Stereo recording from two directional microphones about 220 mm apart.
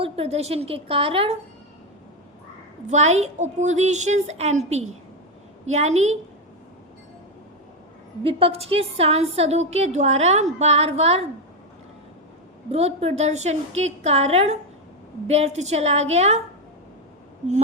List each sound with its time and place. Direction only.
0.0 s a woman's voice: 25° right (ahead or behind)
2.8 s a woman's voice: 30° right (ahead or behind)
8.2 s a woman's voice: 25° right (ahead or behind)
12.7 s a woman's voice: 30° right (ahead or behind)